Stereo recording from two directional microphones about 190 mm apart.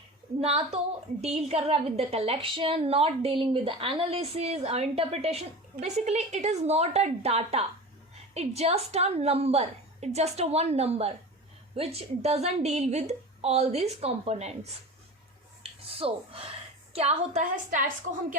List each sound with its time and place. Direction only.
0.3 s a woman's voice: 30° right (ahead or behind)
15.6 s a sound: 30° right (ahead or behind)
16.9 s a woman's voice: 35° right (ahead or behind)